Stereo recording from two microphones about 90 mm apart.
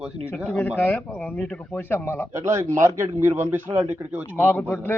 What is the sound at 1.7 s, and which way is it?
Speech, 25° left (ahead or behind).